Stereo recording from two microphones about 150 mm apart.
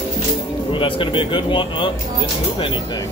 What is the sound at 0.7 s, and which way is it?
Speech, 35° left (ahead or behind).